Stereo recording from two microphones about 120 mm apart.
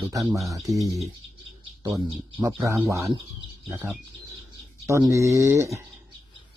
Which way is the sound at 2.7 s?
20° right (ahead or behind).